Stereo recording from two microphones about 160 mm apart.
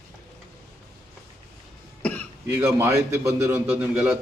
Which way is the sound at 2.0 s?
10° left (ahead or behind).